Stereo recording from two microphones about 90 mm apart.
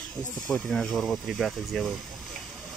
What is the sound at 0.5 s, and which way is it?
Speech, 5° left (ahead or behind).